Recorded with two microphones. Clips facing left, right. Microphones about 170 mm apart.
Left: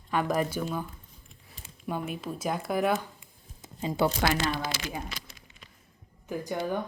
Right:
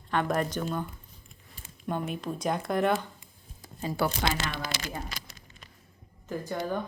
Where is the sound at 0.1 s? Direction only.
5° left (ahead or behind).